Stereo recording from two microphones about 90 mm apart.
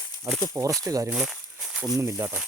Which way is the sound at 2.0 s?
30° right (ahead or behind).